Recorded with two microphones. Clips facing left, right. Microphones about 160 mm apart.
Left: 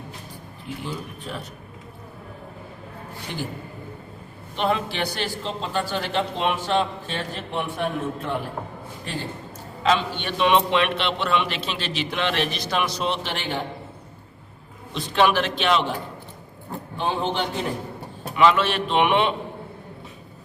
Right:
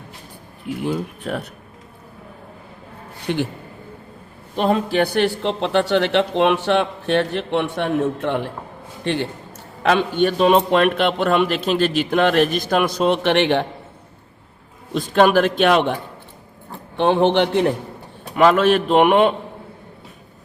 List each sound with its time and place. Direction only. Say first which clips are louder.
0.9 s speech: right 11 dB; 60° right (ahead or behind)
4.5 s a man's voice: right 6 dB; 40° right (ahead or behind); by 8.4 s 75° right (ahead or behind)
9.8 s a man's voice: right 6 dB; 50° right (ahead or behind); by 13.7 s 70° right (ahead or behind)
14.9 s a man's voice: right 6 dB; 45° right (ahead or behind)
17.0 s a man's voice: right 10 dB; 70° right (ahead or behind)
18.3 s a man's voice: right 5 dB; 45° right (ahead or behind)